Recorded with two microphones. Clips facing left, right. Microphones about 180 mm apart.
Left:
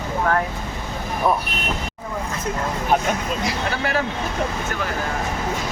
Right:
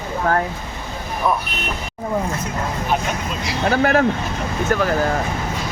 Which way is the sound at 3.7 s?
50° right (ahead or behind).